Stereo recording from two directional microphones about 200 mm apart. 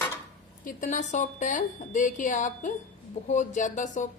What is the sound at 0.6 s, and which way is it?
A woman's voice, 40° left (ahead or behind).